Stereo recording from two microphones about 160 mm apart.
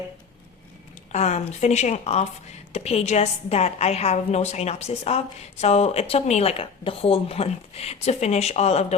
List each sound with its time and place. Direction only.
1.1 s speech: 45° left (ahead or behind)